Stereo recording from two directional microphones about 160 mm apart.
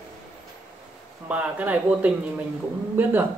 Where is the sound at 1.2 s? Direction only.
10° right (ahead or behind).